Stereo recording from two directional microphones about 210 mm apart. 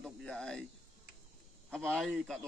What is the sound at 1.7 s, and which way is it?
Speech, 5° left (ahead or behind).